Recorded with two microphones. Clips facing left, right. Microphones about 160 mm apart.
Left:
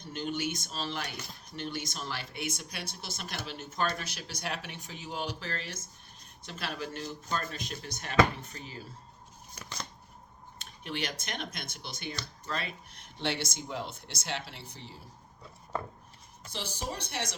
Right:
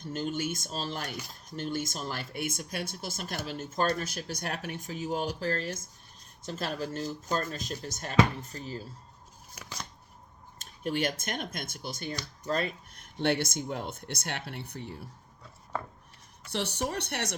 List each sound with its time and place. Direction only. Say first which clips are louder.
0.0 s speech: right 2 dB; 40° right (ahead or behind)
9.6 s scissors: even; 10° right (ahead or behind)
10.6 s speech: right 7 dB; 45° right (ahead or behind)
16.5 s speech: right 6 dB; 70° right (ahead or behind)